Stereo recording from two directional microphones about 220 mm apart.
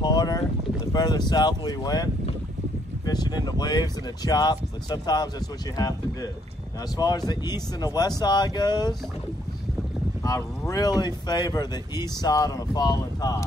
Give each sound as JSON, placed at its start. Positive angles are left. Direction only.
{"t": 0.0, "sound": "boat", "side_deg": 20}
{"t": 0.9, "sound": "speech", "side_deg": 20}
{"t": 10.7, "sound": "speech", "side_deg": 15}